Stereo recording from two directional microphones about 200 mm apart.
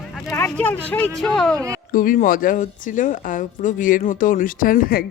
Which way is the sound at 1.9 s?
40° left (ahead or behind).